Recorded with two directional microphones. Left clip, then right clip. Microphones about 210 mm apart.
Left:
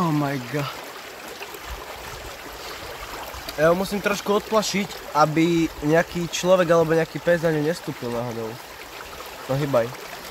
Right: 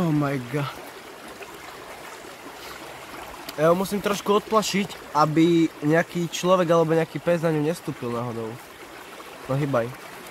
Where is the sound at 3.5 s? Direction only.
5° right (ahead or behind).